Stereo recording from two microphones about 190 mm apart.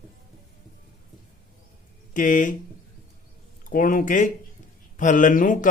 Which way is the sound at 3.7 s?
45° left (ahead or behind).